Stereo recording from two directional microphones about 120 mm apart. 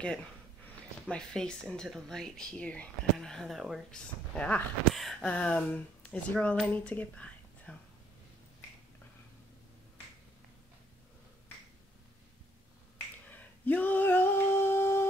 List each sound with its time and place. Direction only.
1.0 s speech: 5° left (ahead or behind)
4.4 s speech: 10° left (ahead or behind)
4.9 s speech: centre (ahead or behind)
12.9 s finger snapping: 15° left (ahead or behind)